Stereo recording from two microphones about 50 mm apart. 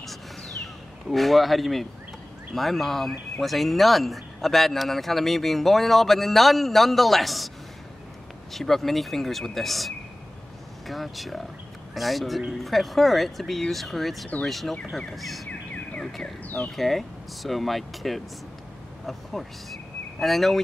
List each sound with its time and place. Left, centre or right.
1.1 s speech: centre
8.5 s speech: centre
15.7 s a sound: left
16.4 s speech: left
16.7 s speech: centre
20.2 s speech: centre